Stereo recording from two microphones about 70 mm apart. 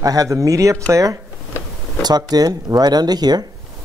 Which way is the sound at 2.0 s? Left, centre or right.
Right.